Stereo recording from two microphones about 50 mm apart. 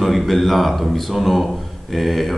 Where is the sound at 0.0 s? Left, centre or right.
Centre.